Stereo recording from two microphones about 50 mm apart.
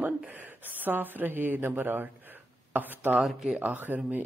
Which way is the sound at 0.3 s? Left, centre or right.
Right.